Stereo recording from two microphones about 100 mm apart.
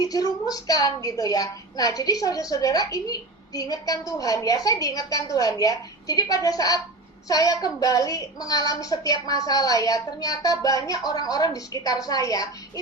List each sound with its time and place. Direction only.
0.0 s a woman's voice: 40° left (ahead or behind)